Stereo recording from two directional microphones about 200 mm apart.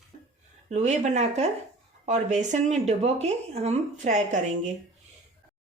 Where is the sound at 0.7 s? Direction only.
35° right (ahead or behind).